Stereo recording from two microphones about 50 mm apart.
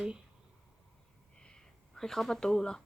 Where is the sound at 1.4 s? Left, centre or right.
Centre.